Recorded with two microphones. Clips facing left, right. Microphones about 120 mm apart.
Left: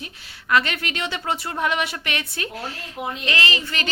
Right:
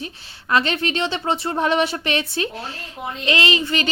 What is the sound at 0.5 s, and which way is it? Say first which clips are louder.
A woman's voice: right 2 dB; 30° right (ahead or behind).